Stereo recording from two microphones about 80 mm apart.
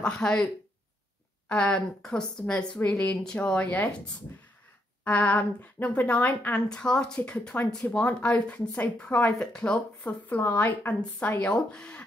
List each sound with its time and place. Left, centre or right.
0.0 s a woman's voice: centre
1.5 s a woman's voice: centre